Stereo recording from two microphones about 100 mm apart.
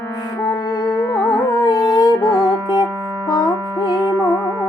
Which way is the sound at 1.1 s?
25° left (ahead or behind).